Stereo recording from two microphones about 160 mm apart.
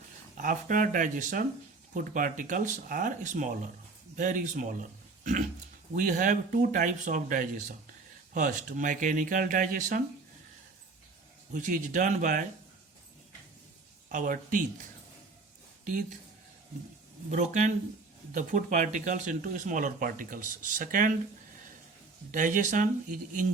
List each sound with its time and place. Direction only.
0.3 s speech: 55° right (ahead or behind)
5.9 s speech: 55° right (ahead or behind)
11.5 s speech: 55° right (ahead or behind)
14.1 s speech: 55° right (ahead or behind)
17.3 s speech: 50° right (ahead or behind)
22.3 s speech: 55° right (ahead or behind)